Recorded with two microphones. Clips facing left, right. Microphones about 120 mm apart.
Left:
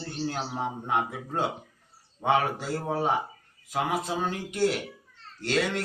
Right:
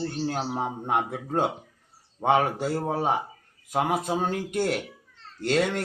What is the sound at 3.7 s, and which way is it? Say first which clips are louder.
Speech: right 3 dB; 50° right (ahead or behind).